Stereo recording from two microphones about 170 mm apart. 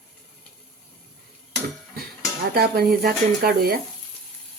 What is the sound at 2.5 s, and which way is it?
A woman's voice, 65° right (ahead or behind).